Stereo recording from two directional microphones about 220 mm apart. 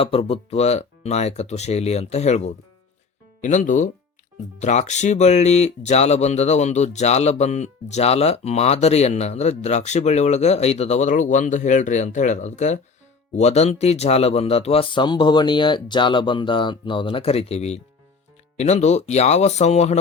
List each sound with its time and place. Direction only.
0.0 s speech: 25° left (ahead or behind)